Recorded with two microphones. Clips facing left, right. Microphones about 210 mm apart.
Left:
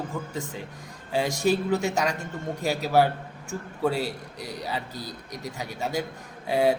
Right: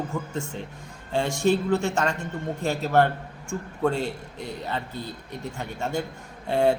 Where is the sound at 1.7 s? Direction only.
40° left (ahead or behind).